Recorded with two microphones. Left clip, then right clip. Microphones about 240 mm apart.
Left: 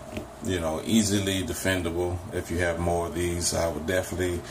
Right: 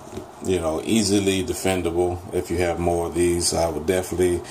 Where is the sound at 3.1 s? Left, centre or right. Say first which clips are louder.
Right 7 dB; right.